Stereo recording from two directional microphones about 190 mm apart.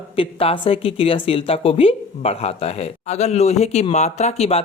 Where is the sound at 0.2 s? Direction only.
30° left (ahead or behind).